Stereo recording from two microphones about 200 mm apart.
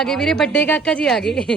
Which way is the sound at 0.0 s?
5° left (ahead or behind).